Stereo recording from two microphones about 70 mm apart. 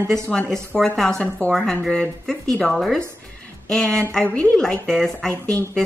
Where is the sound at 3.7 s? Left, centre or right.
Centre.